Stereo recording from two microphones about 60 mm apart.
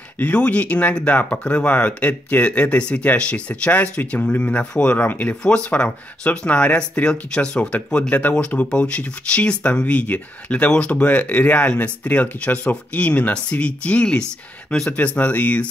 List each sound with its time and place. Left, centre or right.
0.2 s speech: left